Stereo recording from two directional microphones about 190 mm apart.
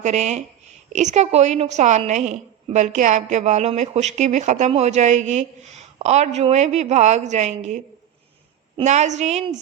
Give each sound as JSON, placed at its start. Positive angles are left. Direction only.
{"t": 0.0, "sound": "a woman's voice", "side_deg": -35}